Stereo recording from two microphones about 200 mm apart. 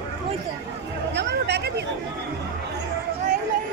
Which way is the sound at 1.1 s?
55° right (ahead or behind).